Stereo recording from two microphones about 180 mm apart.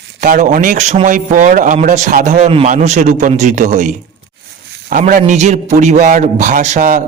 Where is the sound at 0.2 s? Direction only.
45° right (ahead or behind).